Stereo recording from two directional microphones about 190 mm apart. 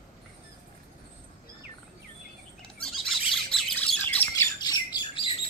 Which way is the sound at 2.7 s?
5° left (ahead or behind).